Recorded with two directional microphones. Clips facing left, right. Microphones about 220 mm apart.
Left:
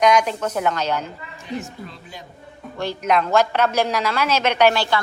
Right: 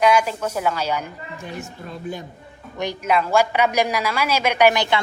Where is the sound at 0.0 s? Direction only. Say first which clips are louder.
Left 1 dB; 5° right (ahead or behind).